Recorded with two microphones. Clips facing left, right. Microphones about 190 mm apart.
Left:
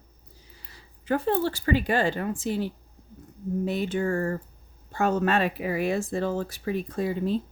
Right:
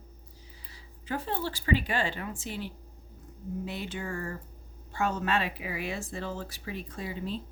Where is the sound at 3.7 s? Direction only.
45° left (ahead or behind).